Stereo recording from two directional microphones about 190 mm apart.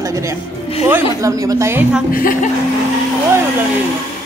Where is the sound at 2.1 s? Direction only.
45° left (ahead or behind).